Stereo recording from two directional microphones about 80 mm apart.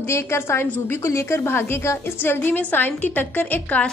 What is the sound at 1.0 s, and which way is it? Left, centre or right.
A woman's voice, left.